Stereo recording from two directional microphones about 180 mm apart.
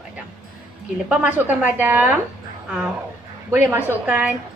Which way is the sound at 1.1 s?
10° right (ahead or behind).